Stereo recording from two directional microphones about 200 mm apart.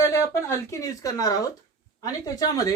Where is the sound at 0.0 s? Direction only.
15° left (ahead or behind).